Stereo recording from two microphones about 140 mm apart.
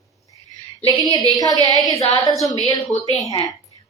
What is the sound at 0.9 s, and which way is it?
A woman's voice, 30° left (ahead or behind).